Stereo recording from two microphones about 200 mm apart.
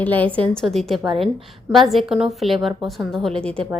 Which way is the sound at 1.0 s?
25° right (ahead or behind).